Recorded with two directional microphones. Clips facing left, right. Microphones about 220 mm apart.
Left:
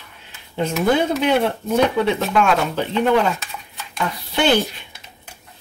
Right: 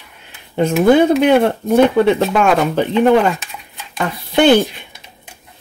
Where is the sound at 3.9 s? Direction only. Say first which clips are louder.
Right 7 dB; 55° right (ahead or behind).